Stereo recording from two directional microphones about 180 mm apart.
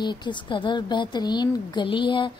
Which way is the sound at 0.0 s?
25° left (ahead or behind).